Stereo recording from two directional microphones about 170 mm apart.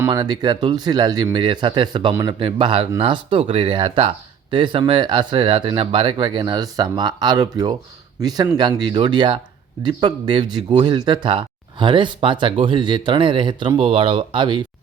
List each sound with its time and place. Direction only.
0.0 s speech: 25° right (ahead or behind)